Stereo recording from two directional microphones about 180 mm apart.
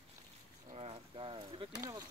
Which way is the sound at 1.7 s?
20° right (ahead or behind).